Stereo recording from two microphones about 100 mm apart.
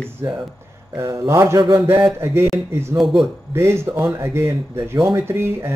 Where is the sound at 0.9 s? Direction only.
30° right (ahead or behind).